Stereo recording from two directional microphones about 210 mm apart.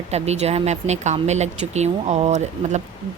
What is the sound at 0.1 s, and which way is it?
Speech, 30° right (ahead or behind).